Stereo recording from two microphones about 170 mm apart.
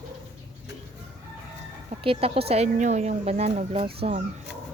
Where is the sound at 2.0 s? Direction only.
35° right (ahead or behind).